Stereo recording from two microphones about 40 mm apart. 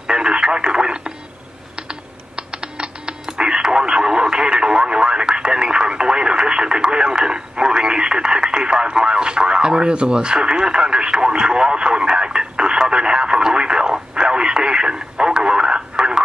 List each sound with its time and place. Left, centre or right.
0.0 s radio: right
1.8 s typing: right
3.3 s radio: centre